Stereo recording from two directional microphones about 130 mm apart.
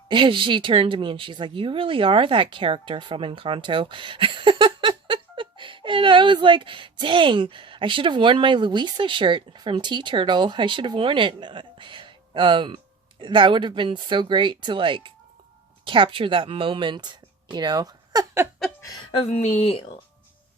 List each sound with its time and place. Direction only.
0.1 s speech: 40° right (ahead or behind)
19.1 s speech: 55° left (ahead or behind)